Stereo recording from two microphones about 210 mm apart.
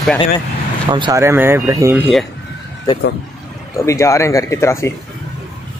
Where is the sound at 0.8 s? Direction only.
20° right (ahead or behind).